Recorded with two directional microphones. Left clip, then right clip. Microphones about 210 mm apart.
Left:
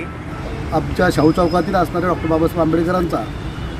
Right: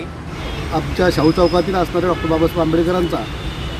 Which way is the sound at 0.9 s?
30° left (ahead or behind).